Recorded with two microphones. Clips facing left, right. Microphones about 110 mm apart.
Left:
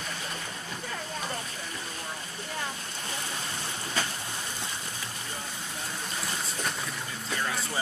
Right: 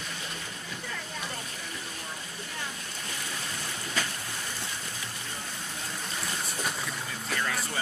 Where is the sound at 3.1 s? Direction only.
30° left (ahead or behind).